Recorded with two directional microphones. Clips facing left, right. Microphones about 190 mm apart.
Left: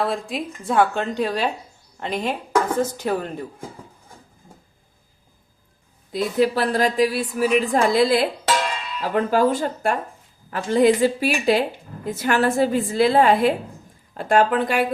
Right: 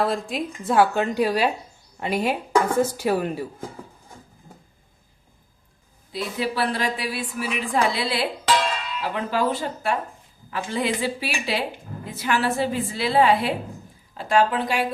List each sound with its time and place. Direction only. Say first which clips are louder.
0.0 s a woman's voice: even; centre (ahead or behind)
6.1 s a woman's voice: left 7 dB; 45° left (ahead or behind)